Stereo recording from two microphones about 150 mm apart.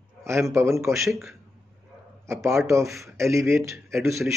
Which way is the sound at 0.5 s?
20° right (ahead or behind).